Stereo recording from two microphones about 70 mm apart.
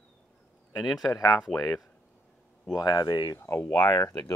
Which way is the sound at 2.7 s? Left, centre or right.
Left.